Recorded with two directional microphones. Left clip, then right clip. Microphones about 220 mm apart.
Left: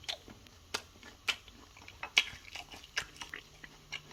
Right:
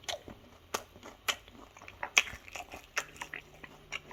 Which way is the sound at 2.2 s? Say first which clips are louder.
Right 2 dB; 15° right (ahead or behind).